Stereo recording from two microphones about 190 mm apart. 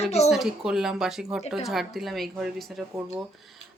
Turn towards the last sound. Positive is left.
turn(degrees=0)  # may be behind; listen again after turning